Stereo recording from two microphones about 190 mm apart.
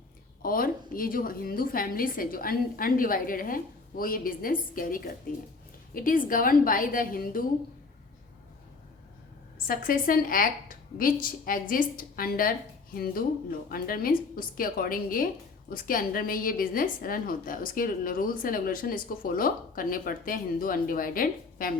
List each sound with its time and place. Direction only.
0.4 s a woman's voice: 50° left (ahead or behind)
9.6 s a woman's voice: 45° left (ahead or behind)